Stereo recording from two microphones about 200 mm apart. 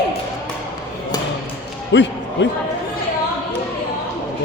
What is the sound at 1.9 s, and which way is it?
Speech, 60° left (ahead or behind).